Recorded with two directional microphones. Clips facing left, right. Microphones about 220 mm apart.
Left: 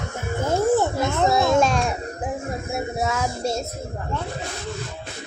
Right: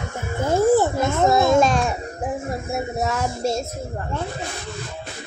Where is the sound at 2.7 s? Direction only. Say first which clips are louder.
Right 1 dB; centre (ahead or behind).